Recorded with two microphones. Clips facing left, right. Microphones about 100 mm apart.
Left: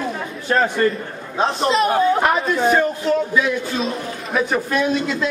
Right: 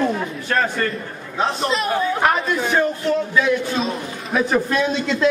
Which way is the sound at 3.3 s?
Centre (ahead or behind).